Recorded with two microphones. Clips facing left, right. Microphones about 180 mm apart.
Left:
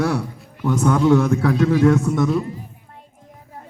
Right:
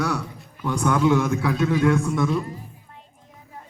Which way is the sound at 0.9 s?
35° left (ahead or behind).